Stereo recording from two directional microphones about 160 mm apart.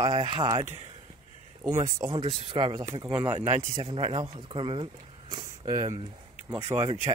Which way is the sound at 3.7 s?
35° right (ahead or behind).